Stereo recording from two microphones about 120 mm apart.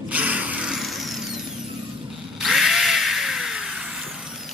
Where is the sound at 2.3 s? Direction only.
Centre (ahead or behind).